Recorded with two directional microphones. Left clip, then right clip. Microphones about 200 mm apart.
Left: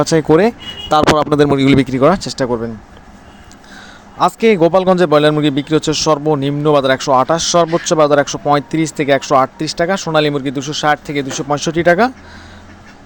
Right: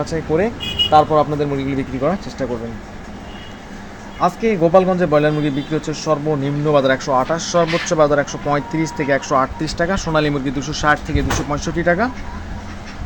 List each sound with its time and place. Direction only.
0.0 s speech: 45° left (ahead or behind)
4.2 s a man's voice: 40° left (ahead or behind)